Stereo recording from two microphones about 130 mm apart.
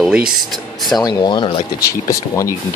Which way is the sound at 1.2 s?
35° left (ahead or behind).